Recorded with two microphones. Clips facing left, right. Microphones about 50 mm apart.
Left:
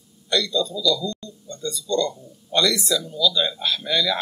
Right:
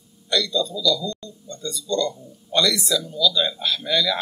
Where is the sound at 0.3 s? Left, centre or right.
Centre.